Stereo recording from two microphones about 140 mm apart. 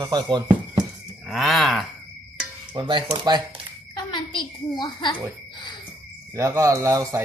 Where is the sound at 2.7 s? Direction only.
35° right (ahead or behind).